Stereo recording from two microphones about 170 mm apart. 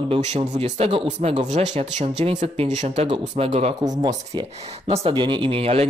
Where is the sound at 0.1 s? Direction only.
40° right (ahead or behind).